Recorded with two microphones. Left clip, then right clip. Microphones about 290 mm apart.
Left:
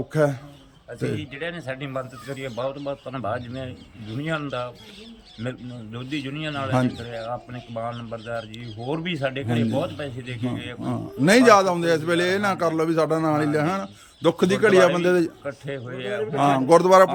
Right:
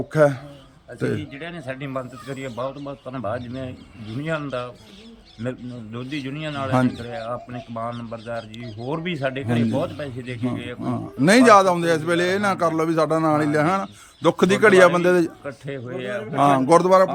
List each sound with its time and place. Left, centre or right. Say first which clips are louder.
0.1 s a man's voice: right 5 dB; centre